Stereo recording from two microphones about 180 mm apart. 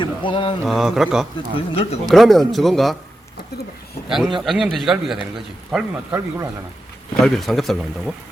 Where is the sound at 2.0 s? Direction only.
Centre (ahead or behind).